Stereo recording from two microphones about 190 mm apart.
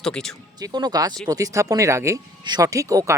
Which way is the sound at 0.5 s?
20° right (ahead or behind).